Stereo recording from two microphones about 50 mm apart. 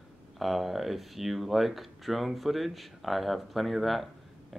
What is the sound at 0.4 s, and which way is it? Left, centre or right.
Speech, centre.